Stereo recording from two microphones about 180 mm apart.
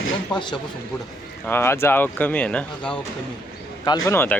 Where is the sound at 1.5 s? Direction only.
15° left (ahead or behind).